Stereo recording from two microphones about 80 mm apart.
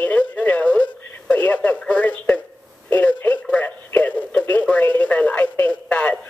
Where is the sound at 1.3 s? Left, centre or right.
Centre.